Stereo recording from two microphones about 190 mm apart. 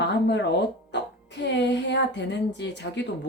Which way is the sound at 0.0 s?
65° left (ahead or behind).